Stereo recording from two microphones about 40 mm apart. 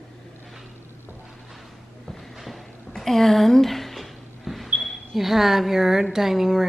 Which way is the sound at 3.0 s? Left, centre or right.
Centre.